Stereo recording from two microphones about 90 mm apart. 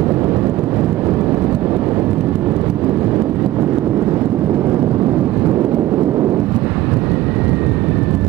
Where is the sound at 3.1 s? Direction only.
25° right (ahead or behind).